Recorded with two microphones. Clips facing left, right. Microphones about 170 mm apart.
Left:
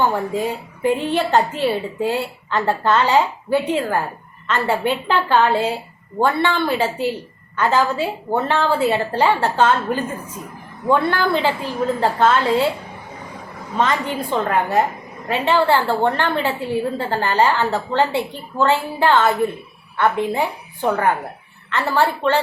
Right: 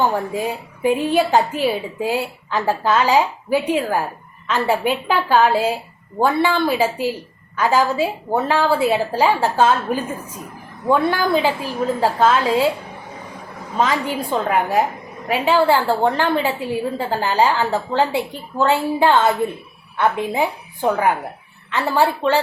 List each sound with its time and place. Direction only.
0.0 s a woman's voice: 10° right (ahead or behind)
13.7 s a woman's voice: 5° right (ahead or behind)